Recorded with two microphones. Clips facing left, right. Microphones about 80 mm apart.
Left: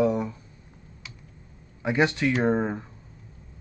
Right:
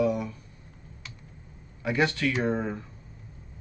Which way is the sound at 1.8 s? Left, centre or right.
Left.